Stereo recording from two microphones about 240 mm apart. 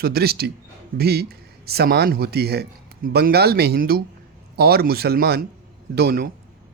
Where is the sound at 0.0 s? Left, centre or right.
Right.